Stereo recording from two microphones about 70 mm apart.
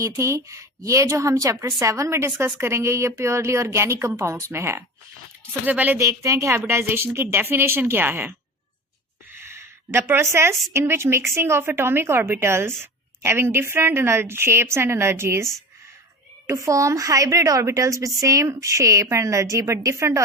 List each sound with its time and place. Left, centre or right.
0.0 s a woman's voice: right
2.1 s a woman's voice: right
5.6 s speech: right
6.0 s a woman's voice: right
6.6 s a woman's voice: right
9.3 s a sound: right
10.3 s a woman's voice: right
16.5 s a woman's voice: right